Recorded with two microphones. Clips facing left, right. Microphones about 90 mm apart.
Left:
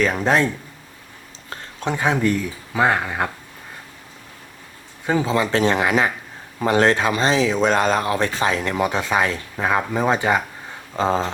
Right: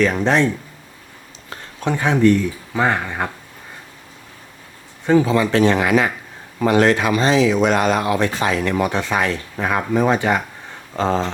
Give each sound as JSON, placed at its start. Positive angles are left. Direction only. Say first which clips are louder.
{"t": 0.0, "sound": "speech", "louder": "right 2 dB", "side_deg": 5}
{"t": 1.9, "sound": "speech", "louder": "right 4 dB", "side_deg": 15}
{"t": 5.2, "sound": "speech", "louder": "right 3 dB", "side_deg": 30}
{"t": 8.7, "sound": "speech", "louder": "right 1 dB", "side_deg": 15}